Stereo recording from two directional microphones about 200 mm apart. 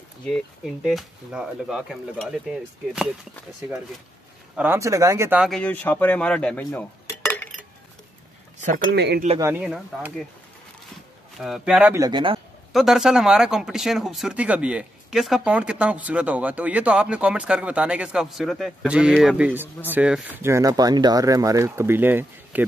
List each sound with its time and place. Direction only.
0.8 s speech: centre (ahead or behind)
4.6 s speech: 15° right (ahead or behind)
5.4 s speech: 5° left (ahead or behind)
6.7 s cutlery: 5° left (ahead or behind)
8.9 s speech: 55° right (ahead or behind)
9.4 s speech: 10° right (ahead or behind)
11.3 s speech: centre (ahead or behind)
12.0 s speech: 25° right (ahead or behind)
12.7 s speech: centre (ahead or behind)